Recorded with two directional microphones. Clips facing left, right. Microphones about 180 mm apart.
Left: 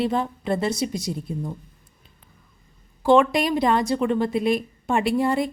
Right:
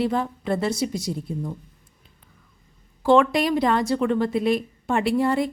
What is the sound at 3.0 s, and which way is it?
A woman's voice, 15° left (ahead or behind).